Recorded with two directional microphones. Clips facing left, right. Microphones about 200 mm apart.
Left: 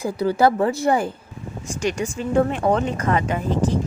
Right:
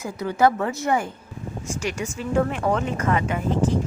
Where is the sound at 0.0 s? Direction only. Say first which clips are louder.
Left 2 dB; 35° left (ahead or behind).